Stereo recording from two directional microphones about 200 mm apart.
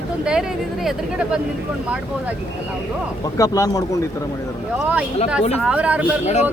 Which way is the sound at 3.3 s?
15° left (ahead or behind).